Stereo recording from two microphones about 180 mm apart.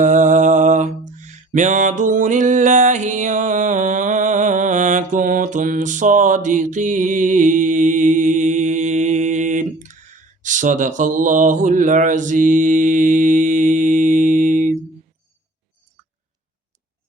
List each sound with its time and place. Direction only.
0.0 s mantra: 45° right (ahead or behind)